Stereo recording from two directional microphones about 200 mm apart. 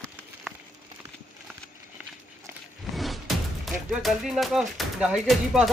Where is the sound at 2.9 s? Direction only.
Centre (ahead or behind).